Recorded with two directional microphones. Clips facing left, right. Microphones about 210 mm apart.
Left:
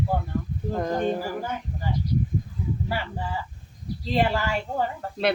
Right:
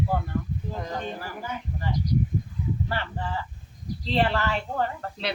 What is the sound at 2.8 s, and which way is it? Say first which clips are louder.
A woman's voice: left 1 dB; 10° left (ahead or behind).